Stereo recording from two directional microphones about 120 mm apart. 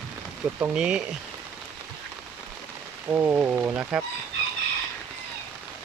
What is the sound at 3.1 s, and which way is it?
Speech, 20° right (ahead or behind).